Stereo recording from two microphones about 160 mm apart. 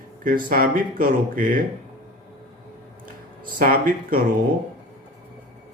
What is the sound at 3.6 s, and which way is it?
Speech, 60° right (ahead or behind).